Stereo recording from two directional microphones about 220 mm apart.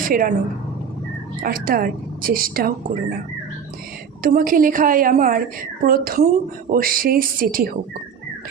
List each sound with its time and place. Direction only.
0.1 s a woman's voice: 40° right (ahead or behind)
1.4 s a woman's voice: 40° right (ahead or behind)
4.2 s a woman's voice: 40° right (ahead or behind)